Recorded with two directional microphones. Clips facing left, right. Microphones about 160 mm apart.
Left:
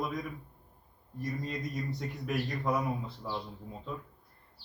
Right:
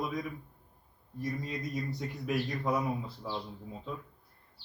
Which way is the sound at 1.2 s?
Centre (ahead or behind).